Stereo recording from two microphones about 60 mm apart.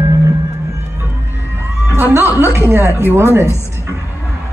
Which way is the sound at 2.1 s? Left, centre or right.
Right.